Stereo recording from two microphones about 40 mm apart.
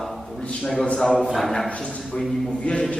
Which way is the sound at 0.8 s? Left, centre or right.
Left.